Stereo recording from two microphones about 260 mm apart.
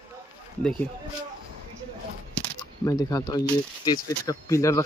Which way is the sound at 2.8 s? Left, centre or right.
Centre.